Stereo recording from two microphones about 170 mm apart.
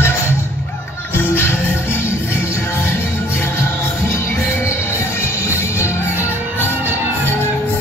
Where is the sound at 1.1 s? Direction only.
15° left (ahead or behind).